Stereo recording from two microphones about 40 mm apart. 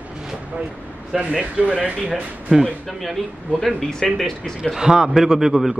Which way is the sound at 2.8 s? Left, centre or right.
Centre.